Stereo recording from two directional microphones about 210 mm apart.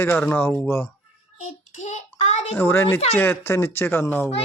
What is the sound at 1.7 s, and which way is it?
Speech, 35° left (ahead or behind).